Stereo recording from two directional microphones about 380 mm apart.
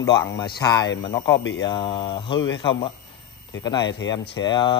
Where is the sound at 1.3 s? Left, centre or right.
Left.